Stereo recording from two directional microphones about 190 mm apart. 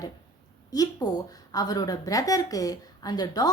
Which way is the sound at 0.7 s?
20° left (ahead or behind).